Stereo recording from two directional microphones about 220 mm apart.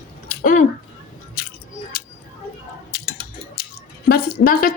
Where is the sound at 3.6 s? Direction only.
45° left (ahead or behind).